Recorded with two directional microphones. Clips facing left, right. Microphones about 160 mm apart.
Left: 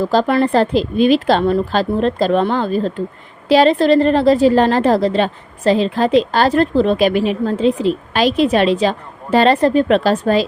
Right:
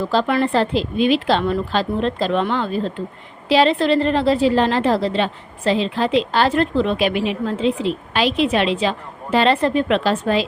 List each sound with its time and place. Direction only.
0.0 s a woman's voice: 40° left (ahead or behind)